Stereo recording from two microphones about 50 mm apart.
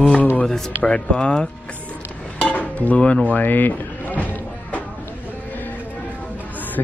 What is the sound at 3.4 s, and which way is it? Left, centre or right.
Music, left.